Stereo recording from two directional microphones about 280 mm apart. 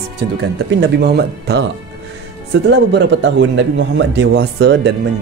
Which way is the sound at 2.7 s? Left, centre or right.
Right.